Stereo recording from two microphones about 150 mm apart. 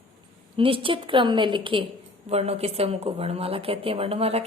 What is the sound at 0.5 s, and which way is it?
A woman's voice, 35° right (ahead or behind).